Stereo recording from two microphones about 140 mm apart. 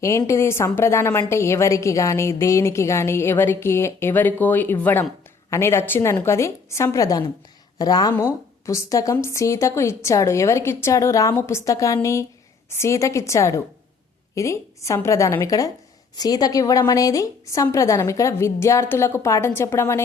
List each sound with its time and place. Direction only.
0.0 s a woman's voice: 20° left (ahead or behind)